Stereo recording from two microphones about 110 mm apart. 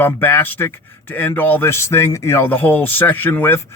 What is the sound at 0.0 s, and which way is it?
Speech, 20° left (ahead or behind).